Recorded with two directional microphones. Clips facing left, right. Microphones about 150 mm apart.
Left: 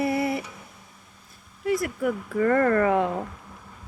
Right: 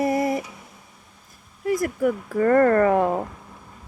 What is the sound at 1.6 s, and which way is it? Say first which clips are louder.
Speech: right 3 dB; 45° right (ahead or behind).